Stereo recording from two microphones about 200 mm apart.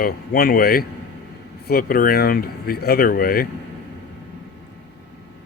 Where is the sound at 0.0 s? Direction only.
50° left (ahead or behind).